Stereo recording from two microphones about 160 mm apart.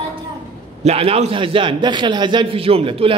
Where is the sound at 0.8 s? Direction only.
40° right (ahead or behind).